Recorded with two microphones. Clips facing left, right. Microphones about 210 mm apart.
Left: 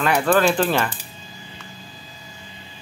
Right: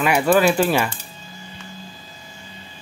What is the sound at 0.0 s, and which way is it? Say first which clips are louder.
Speech: right 2 dB; 10° right (ahead or behind).